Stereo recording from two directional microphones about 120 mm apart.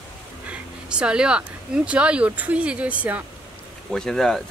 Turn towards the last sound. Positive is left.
turn(degrees=5)  # may be behind; listen again after turning